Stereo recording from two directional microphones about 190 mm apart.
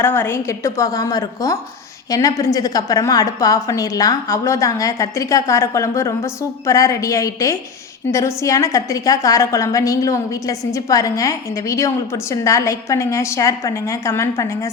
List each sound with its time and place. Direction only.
0.0 s a woman's voice: 10° left (ahead or behind)